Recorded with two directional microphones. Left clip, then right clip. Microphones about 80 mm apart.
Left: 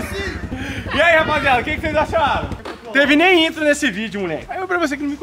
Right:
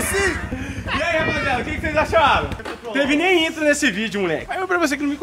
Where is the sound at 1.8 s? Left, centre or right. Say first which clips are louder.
Left 2 dB; centre.